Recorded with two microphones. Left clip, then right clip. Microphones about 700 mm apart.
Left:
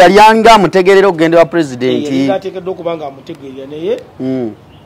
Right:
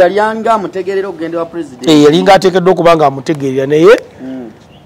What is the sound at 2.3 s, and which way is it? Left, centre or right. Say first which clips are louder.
Speech: right 11 dB; right.